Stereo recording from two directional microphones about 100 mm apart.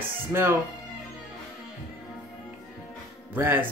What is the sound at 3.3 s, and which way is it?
Speech, 20° right (ahead or behind).